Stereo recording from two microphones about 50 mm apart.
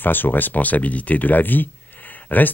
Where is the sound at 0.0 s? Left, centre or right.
Left.